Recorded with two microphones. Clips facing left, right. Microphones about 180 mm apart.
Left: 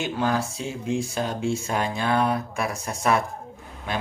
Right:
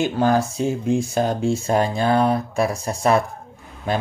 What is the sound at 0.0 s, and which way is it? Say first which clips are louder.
Speech: right 6 dB; 40° right (ahead or behind).